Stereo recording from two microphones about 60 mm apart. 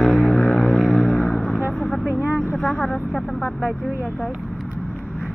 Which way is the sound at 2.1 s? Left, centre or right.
Left.